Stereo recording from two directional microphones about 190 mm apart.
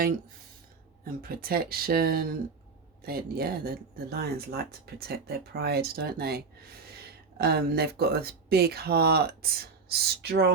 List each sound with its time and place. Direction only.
1.0 s speech: 50° right (ahead or behind)